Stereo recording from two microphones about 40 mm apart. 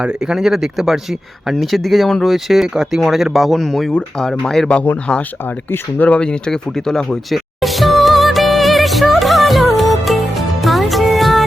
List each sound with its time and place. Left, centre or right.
0.3 s speech: centre
1.5 s speech: centre
2.2 s speech: centre
3.6 s speech: centre
6.0 s speech: left
6.5 s speech: centre
7.3 s music: centre